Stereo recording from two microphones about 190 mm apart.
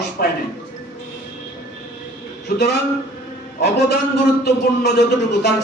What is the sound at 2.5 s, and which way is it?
A man's voice, 60° left (ahead or behind).